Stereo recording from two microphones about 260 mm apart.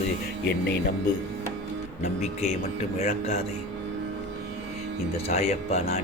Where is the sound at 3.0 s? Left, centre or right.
Left.